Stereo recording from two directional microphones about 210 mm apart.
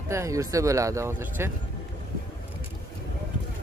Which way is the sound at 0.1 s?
15° right (ahead or behind).